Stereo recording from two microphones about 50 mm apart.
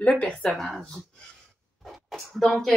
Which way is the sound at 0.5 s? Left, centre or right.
Centre.